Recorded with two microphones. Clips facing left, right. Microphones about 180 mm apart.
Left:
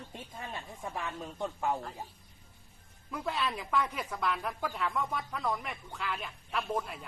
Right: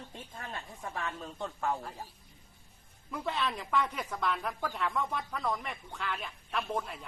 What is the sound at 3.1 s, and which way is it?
Speech, centre (ahead or behind).